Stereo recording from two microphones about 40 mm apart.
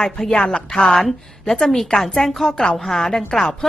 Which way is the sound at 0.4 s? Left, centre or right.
Left.